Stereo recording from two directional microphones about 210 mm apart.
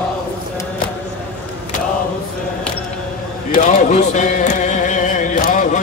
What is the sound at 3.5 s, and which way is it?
Music, 35° left (ahead or behind).